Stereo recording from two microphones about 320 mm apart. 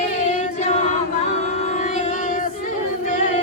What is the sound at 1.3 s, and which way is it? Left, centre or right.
Female singing, left.